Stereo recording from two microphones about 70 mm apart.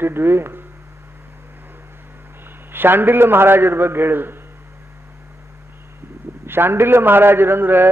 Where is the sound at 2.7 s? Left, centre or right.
Right.